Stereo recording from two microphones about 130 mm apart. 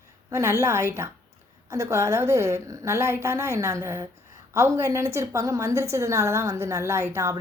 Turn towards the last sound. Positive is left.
turn(degrees=-20)  # may be behind; listen again after turning